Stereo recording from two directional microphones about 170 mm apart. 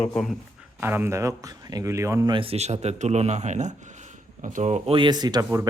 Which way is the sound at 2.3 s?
35° right (ahead or behind).